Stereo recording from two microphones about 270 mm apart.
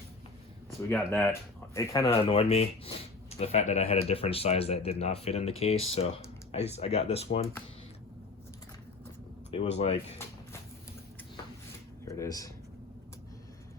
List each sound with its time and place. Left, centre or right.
0.8 s speech: centre
9.7 s speech: left
12.0 s speech: centre